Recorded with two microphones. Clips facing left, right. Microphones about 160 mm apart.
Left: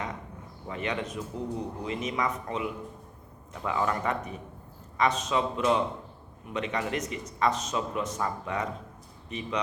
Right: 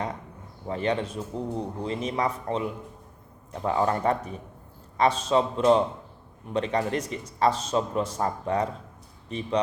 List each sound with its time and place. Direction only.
0.7 s a man's voice: 35° right (ahead or behind)